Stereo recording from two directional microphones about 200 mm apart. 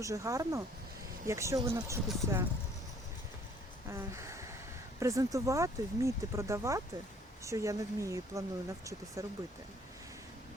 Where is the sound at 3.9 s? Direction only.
15° right (ahead or behind).